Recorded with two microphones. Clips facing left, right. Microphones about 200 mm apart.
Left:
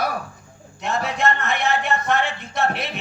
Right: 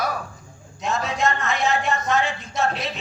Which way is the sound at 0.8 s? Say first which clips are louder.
Left 1 dB; 60° left (ahead or behind).